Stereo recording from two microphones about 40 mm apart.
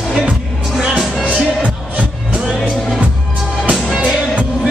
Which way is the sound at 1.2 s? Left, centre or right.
Right.